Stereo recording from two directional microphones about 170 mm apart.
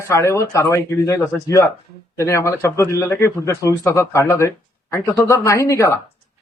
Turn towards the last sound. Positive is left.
turn(degrees=15)  # may be behind; listen again after turning